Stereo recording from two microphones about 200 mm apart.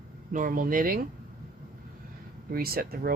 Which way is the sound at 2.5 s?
50° right (ahead or behind).